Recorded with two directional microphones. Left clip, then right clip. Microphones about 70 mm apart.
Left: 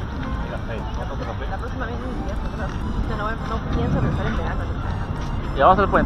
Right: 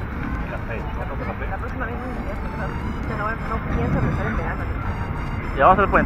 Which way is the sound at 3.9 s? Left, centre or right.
Centre.